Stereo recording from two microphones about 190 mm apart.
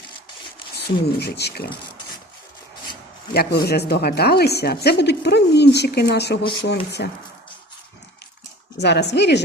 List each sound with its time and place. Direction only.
0.8 s speech: 60° left (ahead or behind)
3.3 s speech: 55° left (ahead or behind)
8.8 s speech: 65° left (ahead or behind)